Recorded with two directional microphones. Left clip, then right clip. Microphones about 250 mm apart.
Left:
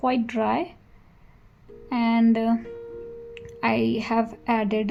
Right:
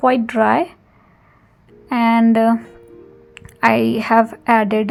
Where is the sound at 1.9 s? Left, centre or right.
Right.